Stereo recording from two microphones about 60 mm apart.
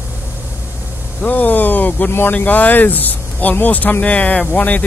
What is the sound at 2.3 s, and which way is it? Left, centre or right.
Speech, left.